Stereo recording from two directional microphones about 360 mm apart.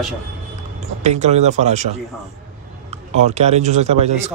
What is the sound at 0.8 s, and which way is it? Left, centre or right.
A man's voice, centre.